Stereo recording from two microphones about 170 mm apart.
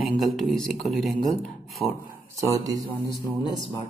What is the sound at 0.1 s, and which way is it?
A man's voice, centre (ahead or behind).